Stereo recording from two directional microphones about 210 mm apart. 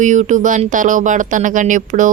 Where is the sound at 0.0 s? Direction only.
35° right (ahead or behind).